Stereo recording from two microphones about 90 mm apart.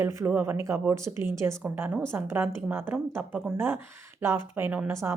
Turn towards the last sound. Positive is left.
turn(degrees=-30)  # may be behind; listen again after turning